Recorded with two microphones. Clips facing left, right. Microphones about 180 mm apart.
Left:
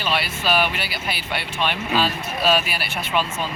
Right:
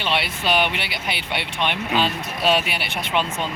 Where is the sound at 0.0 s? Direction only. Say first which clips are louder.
Even; 20° right (ahead or behind).